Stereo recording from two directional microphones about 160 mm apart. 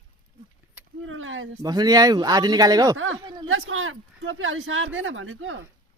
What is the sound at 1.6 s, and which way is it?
Speech, 25° right (ahead or behind).